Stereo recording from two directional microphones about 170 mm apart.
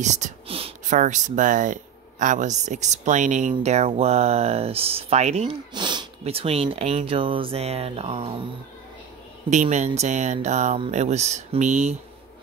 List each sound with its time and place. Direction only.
0.0 s whispering: 45° right (ahead or behind)
0.9 s speech: 45° right (ahead or behind)
5.7 s speech: 25° right (ahead or behind)
9.5 s speech: 45° right (ahead or behind)